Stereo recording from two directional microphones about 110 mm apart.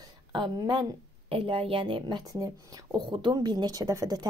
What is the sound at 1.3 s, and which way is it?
Speech, 55° right (ahead or behind).